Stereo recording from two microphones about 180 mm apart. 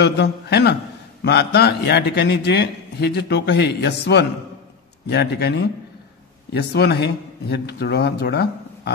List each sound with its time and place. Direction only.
0.0 s a man's voice: 70° left (ahead or behind)
6.5 s a man's voice: 65° left (ahead or behind)